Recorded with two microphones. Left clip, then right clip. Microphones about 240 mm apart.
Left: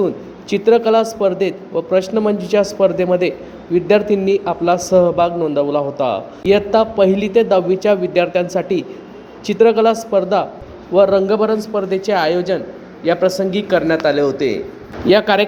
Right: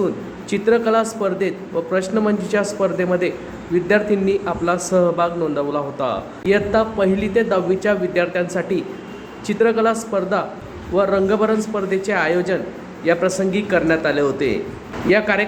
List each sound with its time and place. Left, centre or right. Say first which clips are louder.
0.5 s a man's voice: left 4 dB; centre
9.6 s a man's voice: left 5 dB; centre